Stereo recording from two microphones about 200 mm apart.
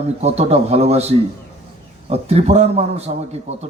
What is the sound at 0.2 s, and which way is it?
Speech, 30° right (ahead or behind).